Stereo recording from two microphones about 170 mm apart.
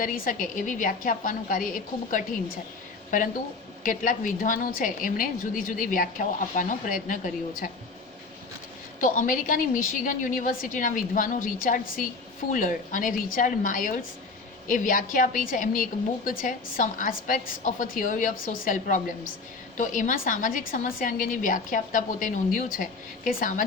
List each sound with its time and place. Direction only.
0.0 s a woman's voice: 55° left (ahead or behind)
3.8 s a woman's voice: 50° left (ahead or behind)
9.0 s a woman's voice: 50° left (ahead or behind)